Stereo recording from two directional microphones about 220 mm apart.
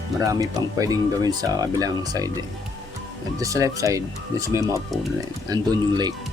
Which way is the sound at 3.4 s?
15° right (ahead or behind).